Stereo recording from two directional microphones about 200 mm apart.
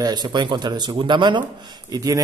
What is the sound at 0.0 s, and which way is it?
Speech, 20° right (ahead or behind).